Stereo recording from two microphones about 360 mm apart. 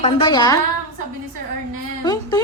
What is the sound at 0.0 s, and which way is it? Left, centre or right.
Speech, centre.